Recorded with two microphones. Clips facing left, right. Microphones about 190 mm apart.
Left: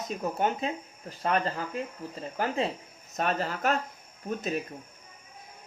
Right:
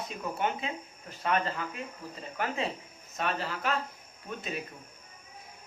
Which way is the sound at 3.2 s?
45° left (ahead or behind).